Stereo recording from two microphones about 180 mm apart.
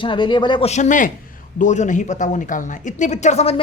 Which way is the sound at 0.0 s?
25° left (ahead or behind).